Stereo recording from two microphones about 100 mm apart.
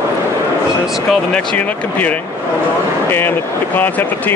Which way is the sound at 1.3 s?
15° left (ahead or behind).